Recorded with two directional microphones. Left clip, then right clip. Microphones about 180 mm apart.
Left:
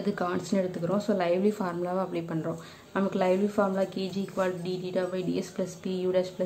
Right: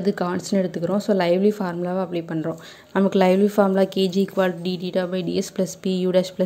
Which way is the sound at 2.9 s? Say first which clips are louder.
Right 8 dB; 40° right (ahead or behind).